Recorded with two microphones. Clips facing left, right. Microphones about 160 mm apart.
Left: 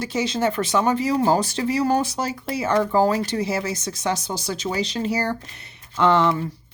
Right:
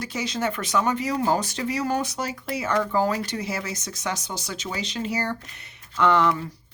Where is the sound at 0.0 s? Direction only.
30° left (ahead or behind).